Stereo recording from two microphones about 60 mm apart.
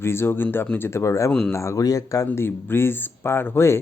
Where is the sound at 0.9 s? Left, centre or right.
Left.